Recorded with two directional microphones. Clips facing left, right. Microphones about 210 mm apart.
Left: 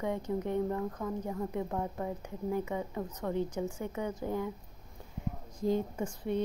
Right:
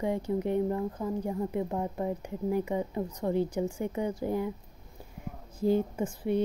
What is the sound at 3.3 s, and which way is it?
Speech, 10° right (ahead or behind).